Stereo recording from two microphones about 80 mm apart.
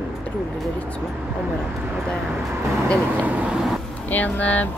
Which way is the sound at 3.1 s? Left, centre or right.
Centre.